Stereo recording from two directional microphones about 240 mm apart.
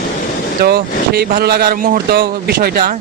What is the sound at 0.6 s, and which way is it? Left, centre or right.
Speech, right.